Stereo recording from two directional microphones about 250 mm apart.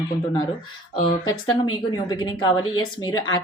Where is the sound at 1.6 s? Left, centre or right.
Centre.